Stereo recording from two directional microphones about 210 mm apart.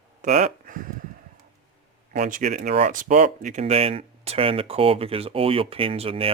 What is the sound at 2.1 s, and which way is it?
Speech, 35° right (ahead or behind).